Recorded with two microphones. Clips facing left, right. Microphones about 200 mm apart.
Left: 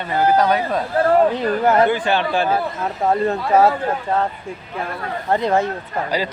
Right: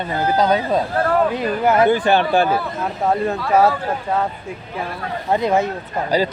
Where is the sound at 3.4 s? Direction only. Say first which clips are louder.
Even; 20° left (ahead or behind).